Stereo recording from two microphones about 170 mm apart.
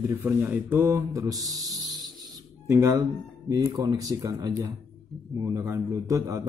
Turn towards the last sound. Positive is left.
turn(degrees=-20)  # may be behind; listen again after turning